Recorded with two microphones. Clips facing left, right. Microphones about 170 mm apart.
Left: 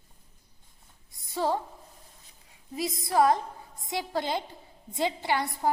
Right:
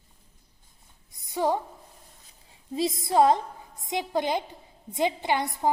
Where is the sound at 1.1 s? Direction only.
15° right (ahead or behind).